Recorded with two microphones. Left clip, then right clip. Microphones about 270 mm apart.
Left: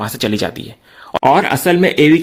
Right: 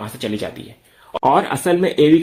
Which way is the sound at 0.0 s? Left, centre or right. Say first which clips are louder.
Left 7 dB; left.